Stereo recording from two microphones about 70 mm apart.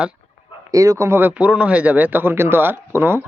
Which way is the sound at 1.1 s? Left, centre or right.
Right.